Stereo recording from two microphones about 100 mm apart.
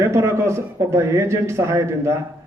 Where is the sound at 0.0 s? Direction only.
25° right (ahead or behind).